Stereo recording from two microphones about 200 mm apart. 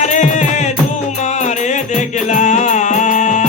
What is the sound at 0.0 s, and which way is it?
Music, 35° left (ahead or behind).